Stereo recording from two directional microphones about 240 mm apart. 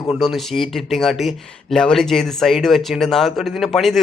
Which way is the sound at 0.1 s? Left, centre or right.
Centre.